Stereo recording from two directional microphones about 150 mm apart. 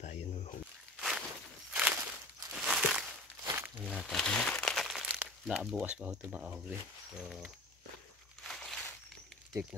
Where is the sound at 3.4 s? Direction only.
15° right (ahead or behind).